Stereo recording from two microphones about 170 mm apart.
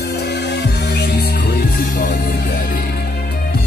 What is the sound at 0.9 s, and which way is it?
Music, 70° left (ahead or behind).